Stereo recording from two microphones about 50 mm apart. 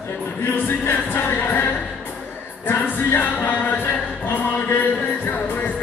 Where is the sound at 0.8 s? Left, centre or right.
Left.